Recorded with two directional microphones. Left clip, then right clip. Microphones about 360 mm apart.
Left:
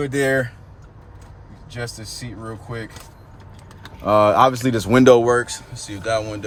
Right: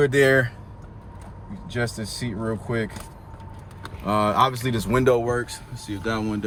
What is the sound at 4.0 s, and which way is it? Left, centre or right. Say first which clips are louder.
Speech: left 6 dB; centre.